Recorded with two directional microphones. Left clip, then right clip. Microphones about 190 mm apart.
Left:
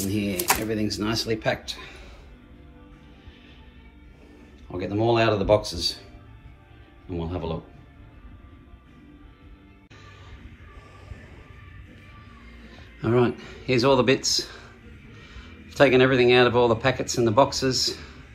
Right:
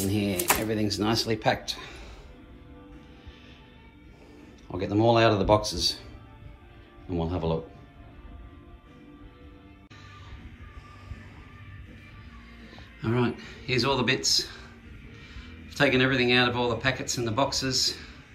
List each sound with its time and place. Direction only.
0.0 s speech: 5° right (ahead or behind)
4.6 s speech: 10° right (ahead or behind)
7.1 s speech: 10° right (ahead or behind)
12.7 s speech: 5° right (ahead or behind)